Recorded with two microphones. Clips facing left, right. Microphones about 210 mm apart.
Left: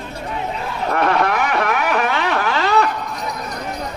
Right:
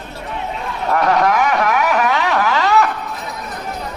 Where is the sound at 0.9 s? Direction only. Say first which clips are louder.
Right 3 dB; 40° right (ahead or behind).